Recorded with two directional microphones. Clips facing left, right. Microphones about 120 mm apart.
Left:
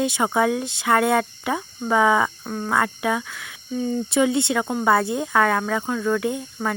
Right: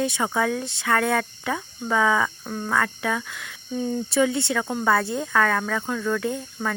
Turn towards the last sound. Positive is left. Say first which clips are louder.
# left 2 dB
turn(degrees=10)  # may be behind; listen again after turning